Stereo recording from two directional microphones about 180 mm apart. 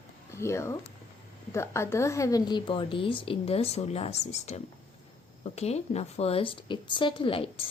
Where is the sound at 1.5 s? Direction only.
15° left (ahead or behind).